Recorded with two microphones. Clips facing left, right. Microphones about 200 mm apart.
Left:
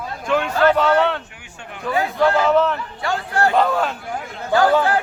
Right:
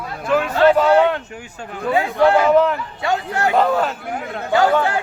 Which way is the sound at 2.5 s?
10° right (ahead or behind).